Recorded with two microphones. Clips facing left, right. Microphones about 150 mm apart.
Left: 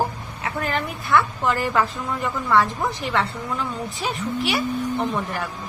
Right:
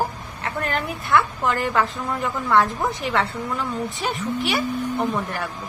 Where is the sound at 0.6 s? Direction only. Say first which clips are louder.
Even; centre (ahead or behind).